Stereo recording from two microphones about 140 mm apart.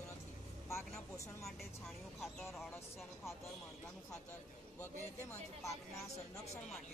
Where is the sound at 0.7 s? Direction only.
20° left (ahead or behind).